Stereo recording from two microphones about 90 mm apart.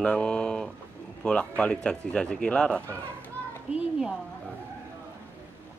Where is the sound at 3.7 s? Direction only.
10° right (ahead or behind).